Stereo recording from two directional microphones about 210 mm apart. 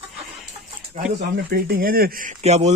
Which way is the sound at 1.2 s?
45° right (ahead or behind).